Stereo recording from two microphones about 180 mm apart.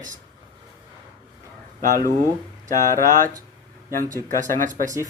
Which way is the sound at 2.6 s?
45° right (ahead or behind).